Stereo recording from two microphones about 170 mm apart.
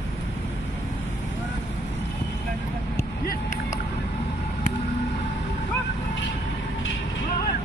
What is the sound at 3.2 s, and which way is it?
Vehicle, 45° left (ahead or behind).